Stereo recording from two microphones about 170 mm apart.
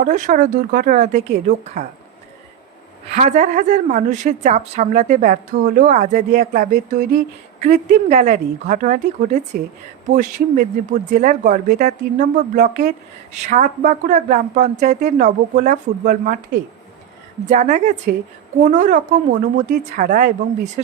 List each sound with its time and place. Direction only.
0.0 s a woman's voice: 50° right (ahead or behind)
3.2 s a woman's voice: 40° right (ahead or behind)
17.4 s a woman's voice: 45° right (ahead or behind)